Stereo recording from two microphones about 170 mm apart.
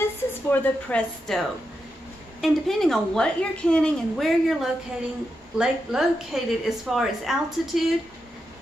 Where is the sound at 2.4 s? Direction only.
Centre (ahead or behind).